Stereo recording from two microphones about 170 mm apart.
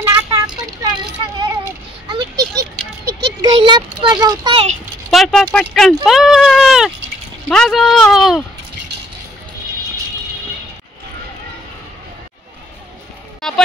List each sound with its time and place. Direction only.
0.0 s vehicle: 15° right (ahead or behind)
1.4 s a sound: 25° right (ahead or behind)
3.3 s a child's voice: 25° right (ahead or behind)
5.1 s speech: centre (ahead or behind)
13.4 s music: 5° left (ahead or behind)